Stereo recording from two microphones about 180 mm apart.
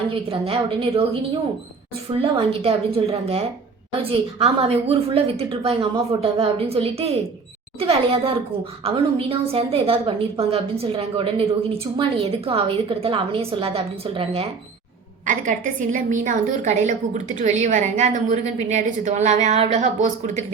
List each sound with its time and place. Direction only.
0.1 s a woman's voice: 30° right (ahead or behind)
2.1 s a woman's voice: 30° right (ahead or behind)
15.3 s a woman's voice: 45° right (ahead or behind)